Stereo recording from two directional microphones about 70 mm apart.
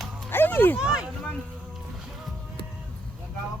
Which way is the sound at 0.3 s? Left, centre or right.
Left.